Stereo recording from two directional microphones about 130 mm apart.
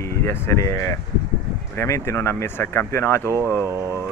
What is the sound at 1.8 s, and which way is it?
Speech, 20° left (ahead or behind).